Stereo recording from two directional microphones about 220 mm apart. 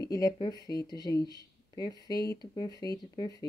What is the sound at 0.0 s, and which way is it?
Speech, 15° left (ahead or behind).